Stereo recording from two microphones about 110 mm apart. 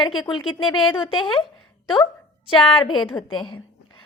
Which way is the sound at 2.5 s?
50° left (ahead or behind).